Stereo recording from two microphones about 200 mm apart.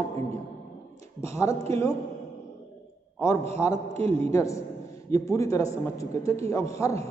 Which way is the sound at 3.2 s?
15° left (ahead or behind).